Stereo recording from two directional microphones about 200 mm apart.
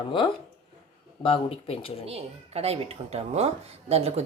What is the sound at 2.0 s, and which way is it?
Speech, 30° right (ahead or behind).